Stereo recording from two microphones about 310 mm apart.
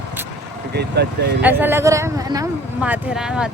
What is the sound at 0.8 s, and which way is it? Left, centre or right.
Speech, right.